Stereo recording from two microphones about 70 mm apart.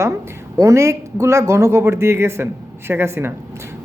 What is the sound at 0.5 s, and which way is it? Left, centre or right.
A man's voice, right.